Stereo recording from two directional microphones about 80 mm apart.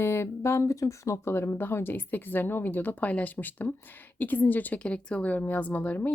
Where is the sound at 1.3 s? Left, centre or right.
Left.